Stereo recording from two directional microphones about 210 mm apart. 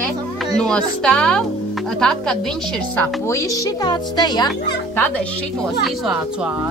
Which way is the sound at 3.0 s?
15° left (ahead or behind).